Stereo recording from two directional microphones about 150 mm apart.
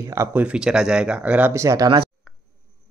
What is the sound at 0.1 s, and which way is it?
Speech, 15° right (ahead or behind).